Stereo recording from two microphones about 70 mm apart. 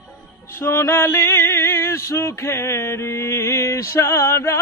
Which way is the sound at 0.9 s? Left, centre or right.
Left.